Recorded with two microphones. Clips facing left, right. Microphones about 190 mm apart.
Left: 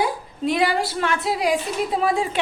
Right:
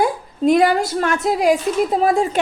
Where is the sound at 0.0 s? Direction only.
50° right (ahead or behind).